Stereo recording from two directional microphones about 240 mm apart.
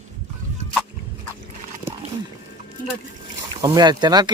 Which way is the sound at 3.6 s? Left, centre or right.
Centre.